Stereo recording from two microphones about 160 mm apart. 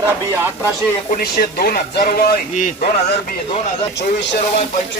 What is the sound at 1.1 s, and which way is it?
Speech, 70° left (ahead or behind).